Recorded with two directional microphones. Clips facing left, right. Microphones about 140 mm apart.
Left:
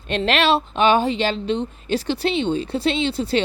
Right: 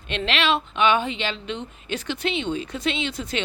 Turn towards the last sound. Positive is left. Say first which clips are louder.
# left 7 dB
turn(degrees=30)  # may be behind; listen again after turning